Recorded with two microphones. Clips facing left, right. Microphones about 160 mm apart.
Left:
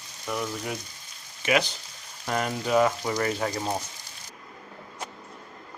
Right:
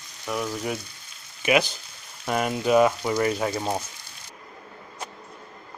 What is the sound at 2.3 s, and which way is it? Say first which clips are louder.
Speech: right 4 dB; 10° right (ahead or behind).